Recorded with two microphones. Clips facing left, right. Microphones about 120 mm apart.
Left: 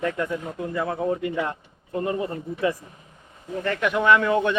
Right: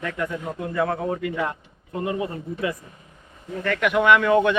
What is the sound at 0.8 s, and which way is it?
Speech, 65° right (ahead or behind).